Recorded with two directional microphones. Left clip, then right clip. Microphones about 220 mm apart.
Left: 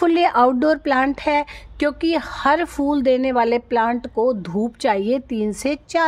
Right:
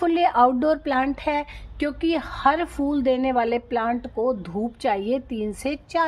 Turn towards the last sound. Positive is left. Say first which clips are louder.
# left 4 dB
turn(degrees=50)  # may be behind; listen again after turning